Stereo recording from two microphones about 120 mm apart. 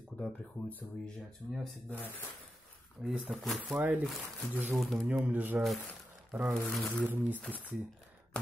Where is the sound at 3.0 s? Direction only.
5° right (ahead or behind).